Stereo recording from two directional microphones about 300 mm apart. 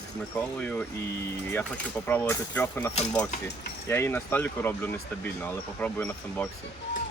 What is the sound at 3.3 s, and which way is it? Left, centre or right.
Speech, left.